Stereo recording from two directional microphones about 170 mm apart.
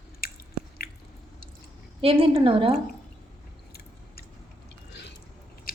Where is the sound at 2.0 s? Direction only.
35° right (ahead or behind).